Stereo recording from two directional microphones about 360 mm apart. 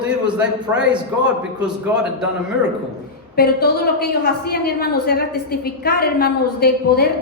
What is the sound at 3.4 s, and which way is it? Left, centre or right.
A woman's voice, left.